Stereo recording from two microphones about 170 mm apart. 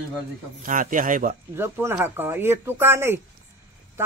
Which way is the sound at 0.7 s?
50° right (ahead or behind).